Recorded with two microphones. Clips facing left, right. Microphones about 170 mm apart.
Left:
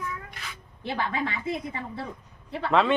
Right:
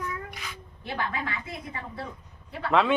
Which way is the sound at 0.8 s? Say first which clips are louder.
Left 3 dB; 25° left (ahead or behind).